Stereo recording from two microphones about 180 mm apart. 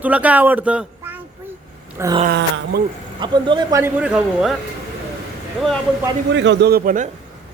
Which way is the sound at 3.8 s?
5° right (ahead or behind).